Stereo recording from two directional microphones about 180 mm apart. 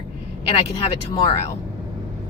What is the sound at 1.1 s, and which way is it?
Speech, 30° left (ahead or behind).